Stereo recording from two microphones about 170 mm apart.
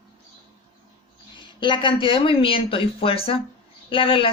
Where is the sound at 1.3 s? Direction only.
30° left (ahead or behind).